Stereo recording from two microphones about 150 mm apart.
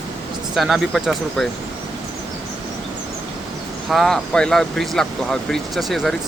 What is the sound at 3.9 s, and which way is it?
Speech, centre (ahead or behind).